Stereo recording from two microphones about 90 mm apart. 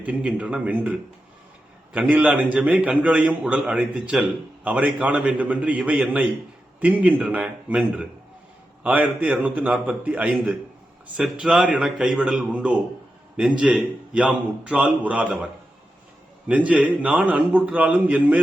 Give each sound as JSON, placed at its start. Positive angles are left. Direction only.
{"t": 0.0, "sound": "a man's voice", "side_deg": -15}
{"t": 16.5, "sound": "a man's voice", "side_deg": -15}